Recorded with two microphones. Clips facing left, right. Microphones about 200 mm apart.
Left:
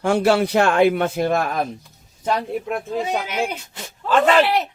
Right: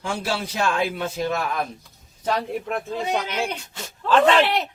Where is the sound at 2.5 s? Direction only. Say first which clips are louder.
Left 3 dB; 5° left (ahead or behind).